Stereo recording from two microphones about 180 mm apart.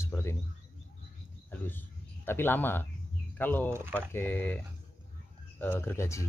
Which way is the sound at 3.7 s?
15° right (ahead or behind).